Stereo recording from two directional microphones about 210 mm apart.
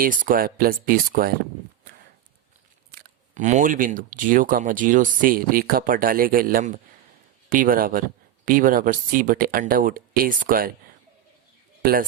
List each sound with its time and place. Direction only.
0.0 s speech: 40° right (ahead or behind)
2.9 s speech: 40° right (ahead or behind)
11.8 s speech: 45° right (ahead or behind)